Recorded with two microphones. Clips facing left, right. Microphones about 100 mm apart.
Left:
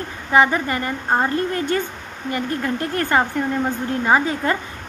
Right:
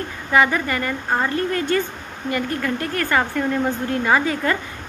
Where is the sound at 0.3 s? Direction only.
25° left (ahead or behind).